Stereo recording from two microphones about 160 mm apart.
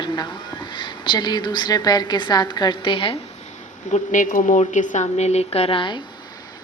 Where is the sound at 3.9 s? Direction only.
50° left (ahead or behind).